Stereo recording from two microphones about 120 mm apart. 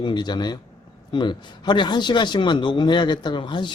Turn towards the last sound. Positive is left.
turn(degrees=40)  # may be behind; listen again after turning